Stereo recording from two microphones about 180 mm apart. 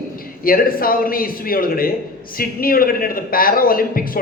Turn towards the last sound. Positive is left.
turn(degrees=55)  # may be behind; listen again after turning